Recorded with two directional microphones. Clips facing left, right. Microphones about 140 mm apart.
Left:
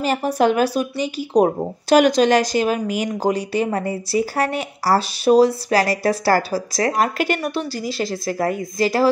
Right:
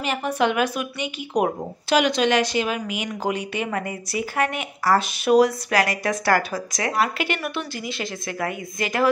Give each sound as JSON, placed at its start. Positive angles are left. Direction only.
{"t": 0.0, "sound": "speech", "side_deg": 40}